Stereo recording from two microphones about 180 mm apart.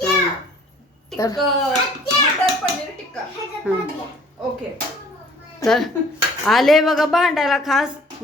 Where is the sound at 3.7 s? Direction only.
10° right (ahead or behind).